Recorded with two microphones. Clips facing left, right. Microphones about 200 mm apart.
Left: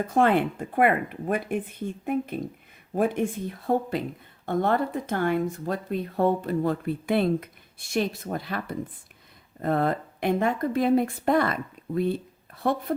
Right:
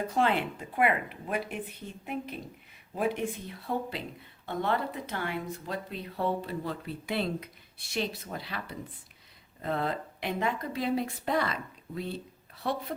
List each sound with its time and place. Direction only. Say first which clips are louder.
0.1 s speech: left 8 dB; 50° left (ahead or behind)